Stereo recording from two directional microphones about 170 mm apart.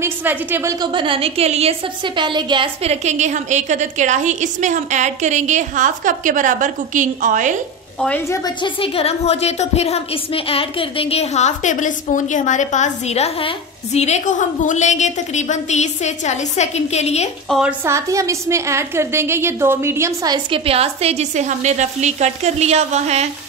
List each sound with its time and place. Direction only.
0.0 s a woman's voice: 10° right (ahead or behind); by 7.5 s 50° right (ahead or behind)
8.3 s a woman's voice: 25° left (ahead or behind)
17.5 s a woman's voice: 5° right (ahead or behind)
17.8 s a woman's voice: 15° right (ahead or behind); by 23.2 s 40° right (ahead or behind)